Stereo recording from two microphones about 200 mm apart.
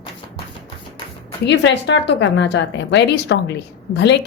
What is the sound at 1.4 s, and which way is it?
A woman's voice, 65° left (ahead or behind).